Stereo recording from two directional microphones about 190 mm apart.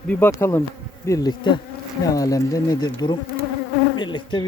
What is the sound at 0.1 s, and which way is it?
Speech, 10° left (ahead or behind).